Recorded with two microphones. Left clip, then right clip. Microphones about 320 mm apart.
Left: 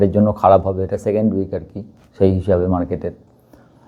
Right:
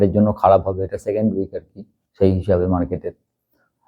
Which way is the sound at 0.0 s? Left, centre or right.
Right.